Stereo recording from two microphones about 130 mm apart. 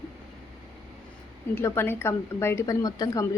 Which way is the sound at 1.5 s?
20° left (ahead or behind).